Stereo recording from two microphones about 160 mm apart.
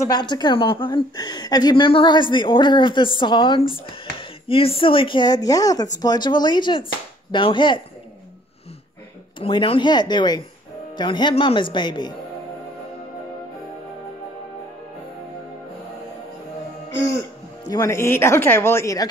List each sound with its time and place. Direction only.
0.0 s speech: 25° left (ahead or behind)
9.4 s speech: 35° left (ahead or behind)
17.6 s speech: 20° left (ahead or behind)